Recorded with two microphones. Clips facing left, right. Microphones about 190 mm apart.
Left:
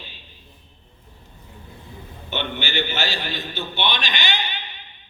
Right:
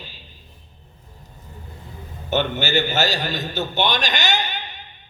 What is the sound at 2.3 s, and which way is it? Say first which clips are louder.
A man's voice: right 6 dB; 40° right (ahead or behind).